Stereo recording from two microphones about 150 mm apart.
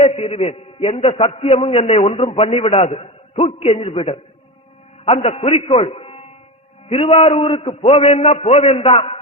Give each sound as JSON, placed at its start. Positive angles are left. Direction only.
{"t": 0.0, "sound": "a man's voice", "side_deg": 40}